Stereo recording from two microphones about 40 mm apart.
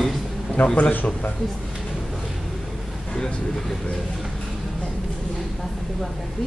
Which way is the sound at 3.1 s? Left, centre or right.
Centre.